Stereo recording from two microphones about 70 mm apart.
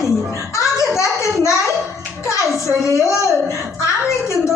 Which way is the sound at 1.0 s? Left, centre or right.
Left.